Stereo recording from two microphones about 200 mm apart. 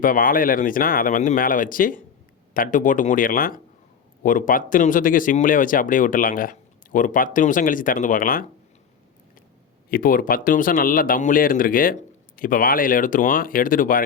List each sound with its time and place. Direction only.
0.0 s speech: 45° left (ahead or behind)
9.9 s speech: 45° left (ahead or behind)